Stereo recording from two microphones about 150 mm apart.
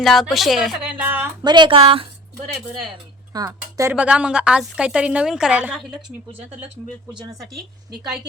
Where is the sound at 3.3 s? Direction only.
20° right (ahead or behind).